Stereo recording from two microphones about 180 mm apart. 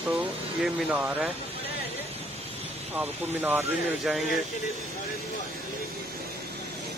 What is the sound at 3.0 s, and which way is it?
Speech, 10° right (ahead or behind).